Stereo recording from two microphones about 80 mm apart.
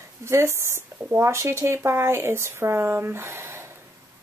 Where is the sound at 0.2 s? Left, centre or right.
Right.